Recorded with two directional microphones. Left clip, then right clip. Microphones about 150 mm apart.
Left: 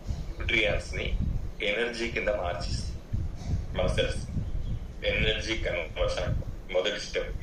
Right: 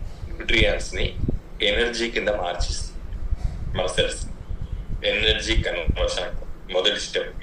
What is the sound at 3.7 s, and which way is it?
A man's voice, 30° right (ahead or behind).